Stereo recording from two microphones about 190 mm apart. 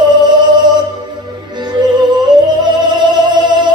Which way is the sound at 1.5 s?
25° right (ahead or behind).